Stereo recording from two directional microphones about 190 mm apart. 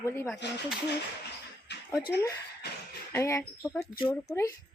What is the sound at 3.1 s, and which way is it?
Speech, 15° left (ahead or behind).